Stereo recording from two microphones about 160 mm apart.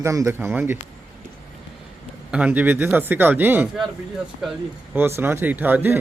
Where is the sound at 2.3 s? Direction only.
10° right (ahead or behind).